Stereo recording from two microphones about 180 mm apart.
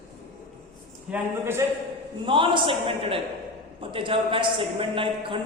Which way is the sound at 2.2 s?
25° right (ahead or behind).